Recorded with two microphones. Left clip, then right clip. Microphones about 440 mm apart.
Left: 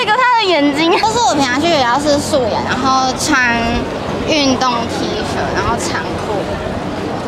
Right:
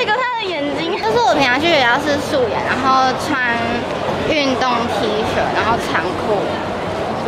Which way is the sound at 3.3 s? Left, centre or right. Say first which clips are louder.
Left 4 dB; left.